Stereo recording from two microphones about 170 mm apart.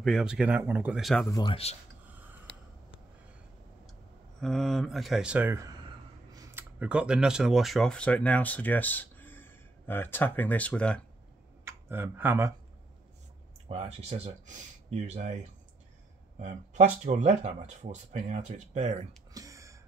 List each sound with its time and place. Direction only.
0.0 s speech: centre (ahead or behind)
1.3 s speech: 25° left (ahead or behind)
4.4 s speech: centre (ahead or behind); by 5.8 s 15° right (ahead or behind)
6.3 s a sound: 20° right (ahead or behind)
6.8 s speech: 5° right (ahead or behind)
11.6 s speech: 15° right (ahead or behind)
13.7 s speech: 35° right (ahead or behind)
16.3 s speech: 45° right (ahead or behind)
19.3 s a sound: 20° right (ahead or behind)